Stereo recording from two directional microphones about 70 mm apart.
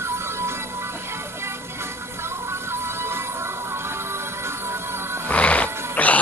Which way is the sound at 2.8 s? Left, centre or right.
Right.